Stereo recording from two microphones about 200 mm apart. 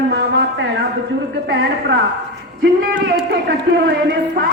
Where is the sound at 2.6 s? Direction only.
50° right (ahead or behind).